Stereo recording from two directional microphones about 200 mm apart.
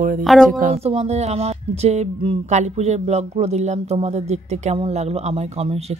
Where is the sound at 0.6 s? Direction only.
30° right (ahead or behind).